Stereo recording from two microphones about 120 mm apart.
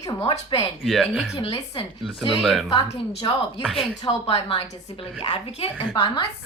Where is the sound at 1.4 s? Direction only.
50° left (ahead or behind).